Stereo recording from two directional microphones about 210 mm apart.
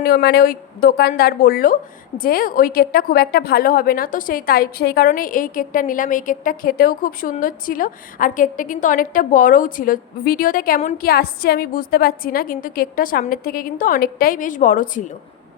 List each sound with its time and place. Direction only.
0.0 s speech: 50° left (ahead or behind)